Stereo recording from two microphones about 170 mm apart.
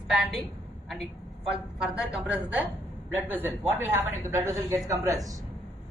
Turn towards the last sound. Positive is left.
turn(degrees=-20)  # may be behind; listen again after turning